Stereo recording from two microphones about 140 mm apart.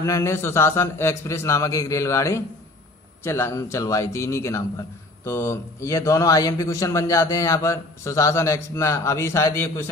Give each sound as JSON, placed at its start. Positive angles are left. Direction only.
{"t": 0.0, "sound": "a man's voice", "side_deg": 20}